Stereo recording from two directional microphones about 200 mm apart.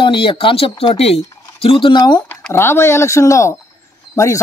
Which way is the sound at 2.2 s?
10° left (ahead or behind).